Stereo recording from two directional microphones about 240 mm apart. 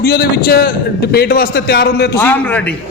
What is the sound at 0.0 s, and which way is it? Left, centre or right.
A man's voice, left.